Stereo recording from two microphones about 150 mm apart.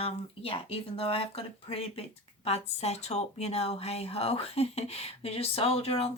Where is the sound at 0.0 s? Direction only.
40° left (ahead or behind).